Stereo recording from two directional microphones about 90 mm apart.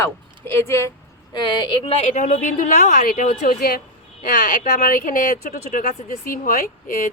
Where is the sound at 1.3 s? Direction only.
60° left (ahead or behind); by 2.1 s 85° left.